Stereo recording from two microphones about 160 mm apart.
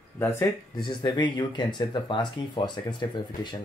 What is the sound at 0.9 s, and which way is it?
Speech, 30° left (ahead or behind).